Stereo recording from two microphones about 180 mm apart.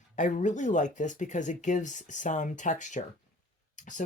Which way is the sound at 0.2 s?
45° left (ahead or behind).